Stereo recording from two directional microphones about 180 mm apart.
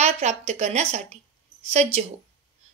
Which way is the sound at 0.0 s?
40° right (ahead or behind).